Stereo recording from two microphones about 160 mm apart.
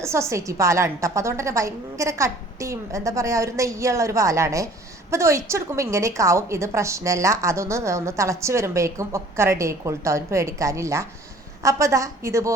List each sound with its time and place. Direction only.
0.0 s a woman's voice: 15° right (ahead or behind)